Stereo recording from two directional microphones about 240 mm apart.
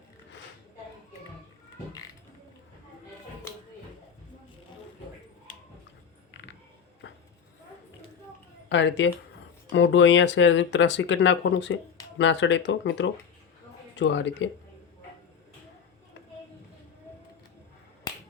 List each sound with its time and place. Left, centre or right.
7.0 s clip-clop: left
8.7 s speech: left